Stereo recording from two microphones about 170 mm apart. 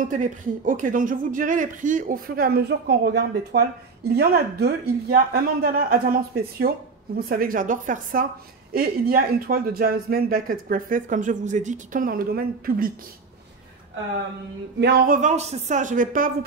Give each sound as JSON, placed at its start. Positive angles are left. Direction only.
{"t": 0.1, "sound": "speech", "side_deg": -50}
{"t": 15.0, "sound": "speech", "side_deg": -45}